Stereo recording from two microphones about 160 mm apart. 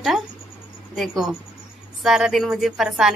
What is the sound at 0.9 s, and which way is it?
A woman's voice, centre (ahead or behind).